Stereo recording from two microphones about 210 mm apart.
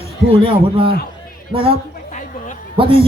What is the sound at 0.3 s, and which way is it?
Speech, 25° right (ahead or behind).